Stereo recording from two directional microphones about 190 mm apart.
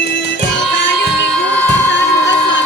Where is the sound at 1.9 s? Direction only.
70° left (ahead or behind).